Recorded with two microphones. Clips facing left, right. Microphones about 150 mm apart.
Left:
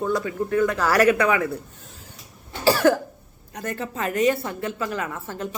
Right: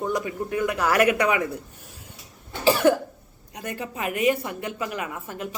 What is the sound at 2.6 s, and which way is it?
Cough, 20° right (ahead or behind).